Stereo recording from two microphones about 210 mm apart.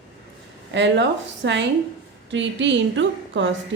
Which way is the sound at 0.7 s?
55° right (ahead or behind).